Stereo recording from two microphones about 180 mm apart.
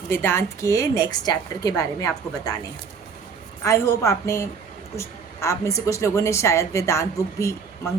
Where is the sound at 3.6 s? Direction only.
15° left (ahead or behind).